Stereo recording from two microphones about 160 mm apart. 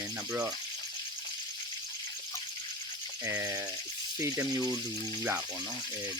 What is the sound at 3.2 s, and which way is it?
Speech, 15° right (ahead or behind).